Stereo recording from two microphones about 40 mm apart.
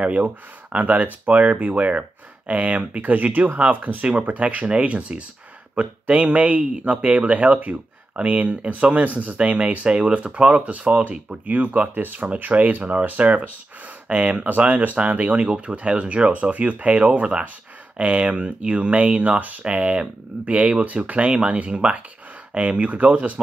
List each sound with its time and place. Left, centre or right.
0.0 s speech: right
11.4 s speech: right